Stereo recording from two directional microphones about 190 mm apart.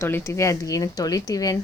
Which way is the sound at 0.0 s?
15° left (ahead or behind).